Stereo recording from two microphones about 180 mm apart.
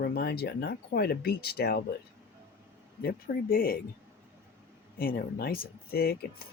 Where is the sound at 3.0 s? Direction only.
55° left (ahead or behind).